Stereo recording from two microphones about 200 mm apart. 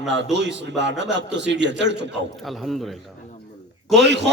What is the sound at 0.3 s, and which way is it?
A man's voice, 60° right (ahead or behind).